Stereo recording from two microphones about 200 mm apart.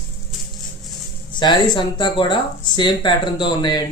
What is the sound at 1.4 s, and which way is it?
Speech, 25° left (ahead or behind).